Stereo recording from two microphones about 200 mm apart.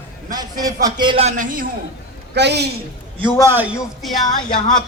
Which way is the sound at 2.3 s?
55° right (ahead or behind).